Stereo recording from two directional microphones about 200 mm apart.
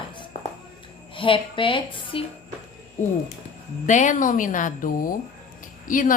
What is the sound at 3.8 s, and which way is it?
Speech, 40° left (ahead or behind).